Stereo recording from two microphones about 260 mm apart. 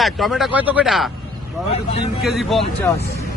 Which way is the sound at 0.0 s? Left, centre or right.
Centre.